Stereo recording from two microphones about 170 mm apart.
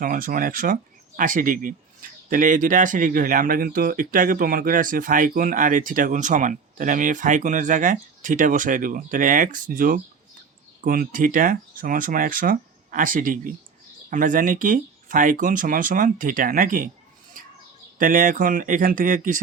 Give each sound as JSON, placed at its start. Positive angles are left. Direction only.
{"t": 0.0, "sound": "speech", "side_deg": -55}
{"t": 17.9, "sound": "speech", "side_deg": -50}